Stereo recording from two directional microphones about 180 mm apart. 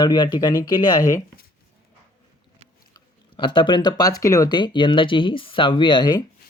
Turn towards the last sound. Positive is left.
turn(degrees=25)  # may be behind; listen again after turning